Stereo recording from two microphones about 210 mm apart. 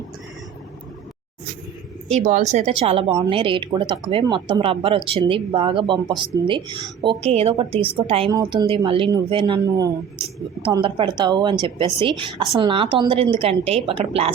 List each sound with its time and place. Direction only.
2.0 s speech: 35° right (ahead or behind)